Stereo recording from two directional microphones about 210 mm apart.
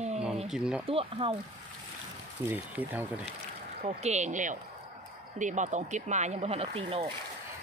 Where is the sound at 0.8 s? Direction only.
25° right (ahead or behind).